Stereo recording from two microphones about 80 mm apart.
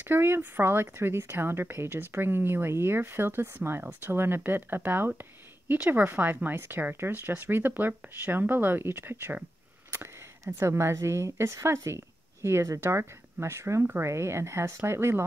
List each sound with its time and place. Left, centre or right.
0.1 s speech: right
10.4 s a woman's voice: right